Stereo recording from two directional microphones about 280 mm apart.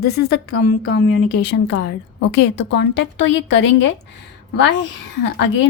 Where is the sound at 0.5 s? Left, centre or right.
Left.